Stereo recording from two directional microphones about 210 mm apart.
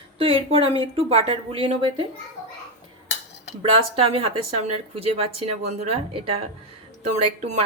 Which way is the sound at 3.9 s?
25° right (ahead or behind).